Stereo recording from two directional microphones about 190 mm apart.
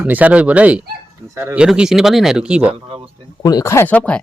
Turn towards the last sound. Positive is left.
turn(degrees=5)  # may be behind; listen again after turning